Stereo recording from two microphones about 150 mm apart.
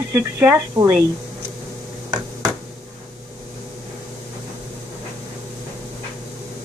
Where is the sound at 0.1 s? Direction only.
20° right (ahead or behind).